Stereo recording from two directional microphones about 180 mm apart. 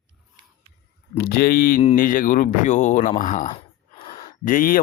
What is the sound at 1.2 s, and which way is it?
Speech, 60° left (ahead or behind).